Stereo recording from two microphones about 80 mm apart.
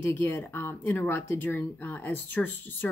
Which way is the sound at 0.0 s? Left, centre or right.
Left.